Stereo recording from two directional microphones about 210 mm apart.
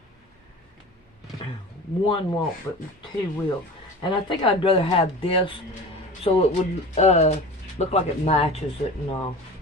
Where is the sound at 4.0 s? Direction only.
25° left (ahead or behind).